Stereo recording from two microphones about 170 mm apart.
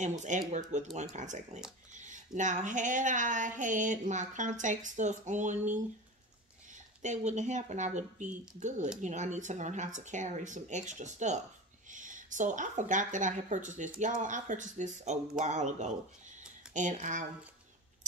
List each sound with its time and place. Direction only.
0.5 s speech: 45° right (ahead or behind)
7.0 s speech: 45° right (ahead or behind)